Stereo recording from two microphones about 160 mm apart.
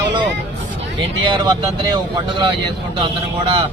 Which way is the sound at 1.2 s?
30° right (ahead or behind).